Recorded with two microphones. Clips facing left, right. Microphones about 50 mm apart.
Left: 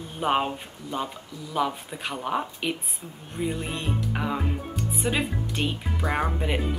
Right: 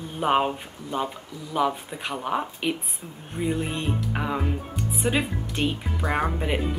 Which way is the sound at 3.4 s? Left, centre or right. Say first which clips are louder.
Right 3 dB; centre.